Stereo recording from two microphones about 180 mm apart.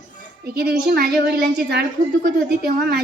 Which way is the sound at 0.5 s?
60° right (ahead or behind).